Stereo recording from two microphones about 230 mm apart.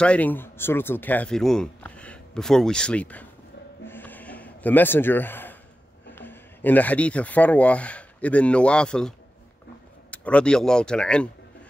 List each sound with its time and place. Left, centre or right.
0.0 s speech: centre
3.8 s a sound: centre
6.1 s speech: centre
10.1 s speech: centre